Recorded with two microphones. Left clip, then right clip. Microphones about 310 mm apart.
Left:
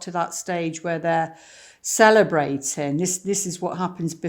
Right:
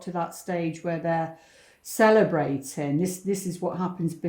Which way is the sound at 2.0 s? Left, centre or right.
Left.